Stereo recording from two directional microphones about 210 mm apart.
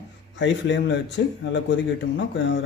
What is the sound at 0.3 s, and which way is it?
A man's voice, 60° left (ahead or behind).